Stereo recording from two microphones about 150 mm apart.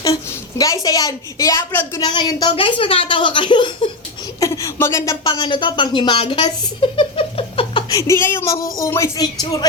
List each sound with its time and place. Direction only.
0.6 s a woman's voice: 25° left (ahead or behind)
4.4 s a woman's voice: 20° left (ahead or behind)
5.2 s speech: 35° left (ahead or behind)
7.9 s a woman's voice: 20° left (ahead or behind)